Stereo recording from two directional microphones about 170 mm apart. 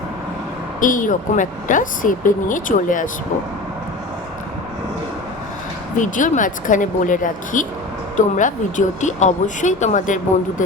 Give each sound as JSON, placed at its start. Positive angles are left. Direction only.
{"t": 0.8, "sound": "speech", "side_deg": 50}
{"t": 6.0, "sound": "speech", "side_deg": 50}